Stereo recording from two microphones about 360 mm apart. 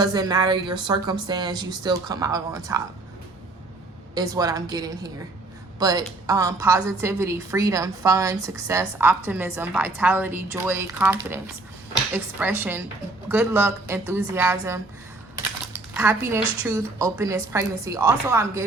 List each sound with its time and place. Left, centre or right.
0.0 s a woman's voice: centre
4.1 s a woman's voice: centre